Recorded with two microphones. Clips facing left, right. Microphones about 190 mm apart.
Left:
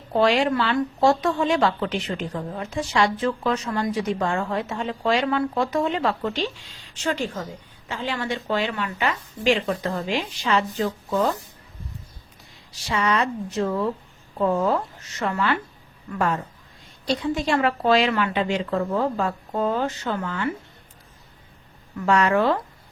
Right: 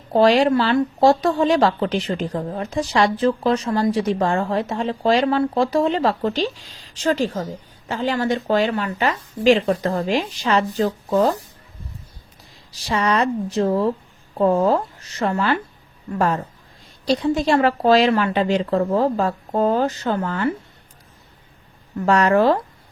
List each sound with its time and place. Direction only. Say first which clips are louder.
0.1 s a woman's voice: right 5 dB; 35° right (ahead or behind)
12.9 s a woman's voice: right 4 dB; 40° right (ahead or behind)
21.9 s a woman's voice: right 4 dB; 40° right (ahead or behind)